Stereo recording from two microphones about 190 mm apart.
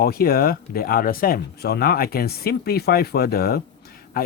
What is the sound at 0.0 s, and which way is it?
Speech, 55° left (ahead or behind).